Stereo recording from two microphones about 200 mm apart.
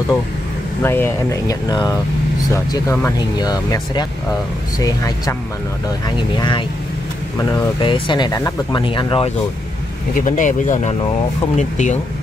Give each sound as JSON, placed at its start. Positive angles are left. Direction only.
{"t": 0.8, "sound": "speech", "side_deg": 10}
{"t": 7.8, "sound": "speech", "side_deg": 25}
{"t": 10.1, "sound": "speech", "side_deg": 40}